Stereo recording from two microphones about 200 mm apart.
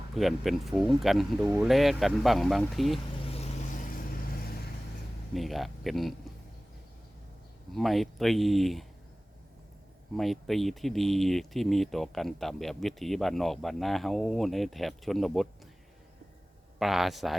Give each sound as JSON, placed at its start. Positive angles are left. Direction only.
{"t": 0.2, "sound": "speech", "side_deg": 0}
{"t": 3.3, "sound": "vehicle", "side_deg": 35}
{"t": 5.3, "sound": "speech", "side_deg": 0}
{"t": 7.7, "sound": "speech", "side_deg": 0}
{"t": 10.2, "sound": "speech", "side_deg": 0}
{"t": 16.8, "sound": "speech", "side_deg": 0}